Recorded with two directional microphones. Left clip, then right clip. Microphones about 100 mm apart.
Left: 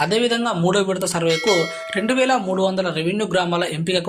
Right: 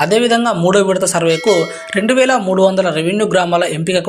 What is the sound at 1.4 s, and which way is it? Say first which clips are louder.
Speech: right 4 dB; centre (ahead or behind).